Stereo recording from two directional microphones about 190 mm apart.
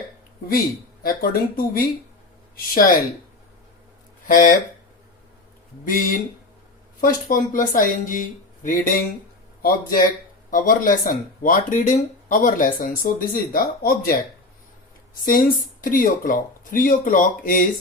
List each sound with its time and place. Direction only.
1.0 s speech: 50° left (ahead or behind)
4.3 s speech: 45° left (ahead or behind)
5.8 s speech: 45° left (ahead or behind)